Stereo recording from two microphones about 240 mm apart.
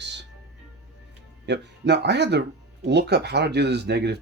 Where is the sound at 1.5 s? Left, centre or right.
Right.